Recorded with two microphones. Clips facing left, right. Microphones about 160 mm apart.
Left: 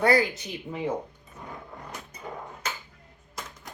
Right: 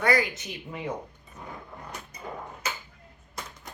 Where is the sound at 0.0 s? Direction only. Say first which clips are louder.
Left 3 dB; 30° left (ahead or behind).